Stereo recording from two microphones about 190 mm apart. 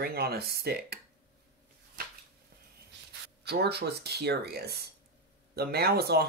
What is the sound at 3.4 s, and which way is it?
Speech, 60° right (ahead or behind).